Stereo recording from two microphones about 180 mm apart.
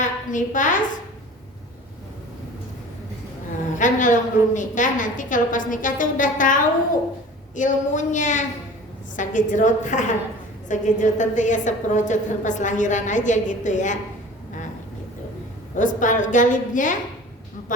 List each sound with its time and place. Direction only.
0.0 s a woman's voice: 45° left (ahead or behind)
3.8 s a woman's voice: 45° left (ahead or behind)
15.7 s a woman's voice: 45° left (ahead or behind)